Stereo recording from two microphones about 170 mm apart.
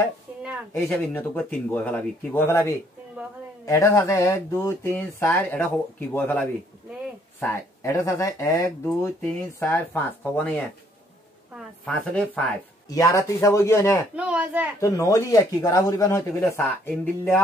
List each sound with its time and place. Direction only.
0.7 s a woman's voice: 10° left (ahead or behind)
12.9 s speech: 20° left (ahead or behind)
14.1 s speech: 5° right (ahead or behind)
14.8 s speech: 20° left (ahead or behind)